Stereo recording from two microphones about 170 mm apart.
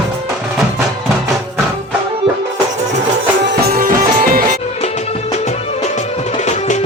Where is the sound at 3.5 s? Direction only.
55° right (ahead or behind).